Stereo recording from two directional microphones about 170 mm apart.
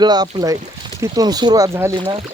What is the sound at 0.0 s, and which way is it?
Speech, 25° right (ahead or behind).